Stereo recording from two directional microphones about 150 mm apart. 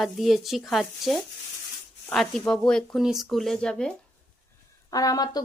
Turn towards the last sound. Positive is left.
turn(degrees=25)  # may be behind; listen again after turning